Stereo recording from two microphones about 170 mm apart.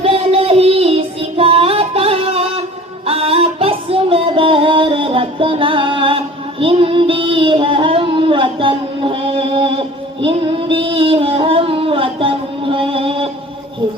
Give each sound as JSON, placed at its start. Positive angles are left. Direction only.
{"t": 0.0, "sound": "child singing", "side_deg": -35}
{"t": 3.1, "sound": "music", "side_deg": -35}